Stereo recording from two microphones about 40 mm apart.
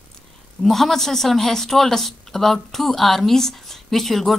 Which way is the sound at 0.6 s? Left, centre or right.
Centre.